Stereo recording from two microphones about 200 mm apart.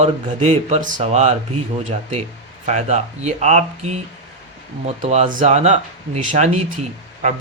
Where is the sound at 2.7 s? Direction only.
35° right (ahead or behind).